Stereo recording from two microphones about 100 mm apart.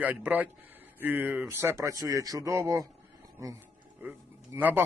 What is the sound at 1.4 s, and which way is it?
Speech, 30° right (ahead or behind).